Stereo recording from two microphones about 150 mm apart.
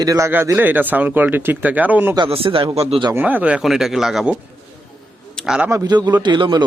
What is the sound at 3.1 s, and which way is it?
Speech, 10° right (ahead or behind).